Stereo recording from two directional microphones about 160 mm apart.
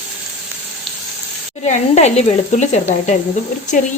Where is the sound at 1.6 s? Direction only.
45° left (ahead or behind).